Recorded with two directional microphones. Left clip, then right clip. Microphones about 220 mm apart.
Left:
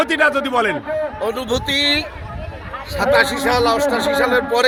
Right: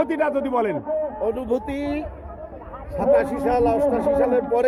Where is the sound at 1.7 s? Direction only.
50° right (ahead or behind).